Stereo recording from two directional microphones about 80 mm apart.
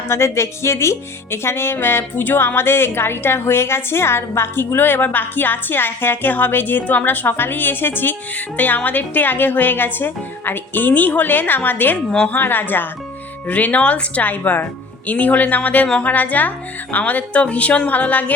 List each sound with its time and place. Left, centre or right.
0.1 s speech: left; by 18.3 s centre